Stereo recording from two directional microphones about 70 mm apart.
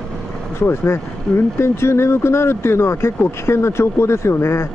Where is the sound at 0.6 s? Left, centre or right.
Left.